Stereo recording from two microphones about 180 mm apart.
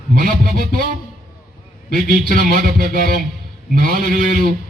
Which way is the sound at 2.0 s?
50° right (ahead or behind).